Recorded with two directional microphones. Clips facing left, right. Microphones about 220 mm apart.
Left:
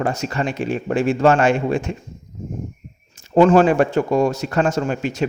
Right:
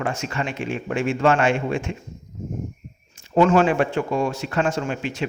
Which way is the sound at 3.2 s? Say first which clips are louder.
Left 4 dB; 35° left (ahead or behind).